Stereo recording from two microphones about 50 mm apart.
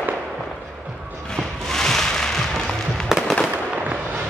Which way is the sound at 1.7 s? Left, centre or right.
Centre.